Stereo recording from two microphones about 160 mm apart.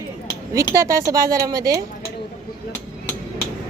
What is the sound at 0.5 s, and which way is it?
Speech, 20° right (ahead or behind).